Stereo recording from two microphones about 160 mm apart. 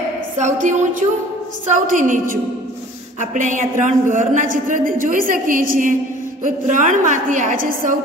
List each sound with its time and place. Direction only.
0.4 s a woman's voice: 50° right (ahead or behind)